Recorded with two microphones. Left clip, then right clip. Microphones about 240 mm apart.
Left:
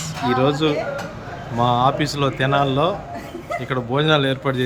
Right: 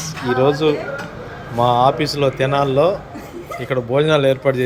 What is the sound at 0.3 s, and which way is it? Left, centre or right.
A man's voice, centre.